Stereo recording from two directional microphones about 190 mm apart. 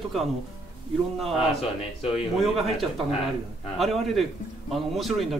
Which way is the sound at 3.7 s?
Centre (ahead or behind).